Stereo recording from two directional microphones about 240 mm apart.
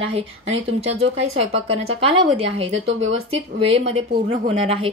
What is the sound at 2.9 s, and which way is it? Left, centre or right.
Speech, right.